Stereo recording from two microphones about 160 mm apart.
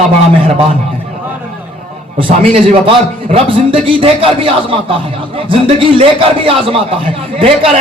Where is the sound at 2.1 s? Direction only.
35° right (ahead or behind).